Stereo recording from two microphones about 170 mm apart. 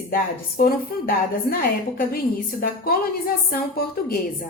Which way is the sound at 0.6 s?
60° left (ahead or behind).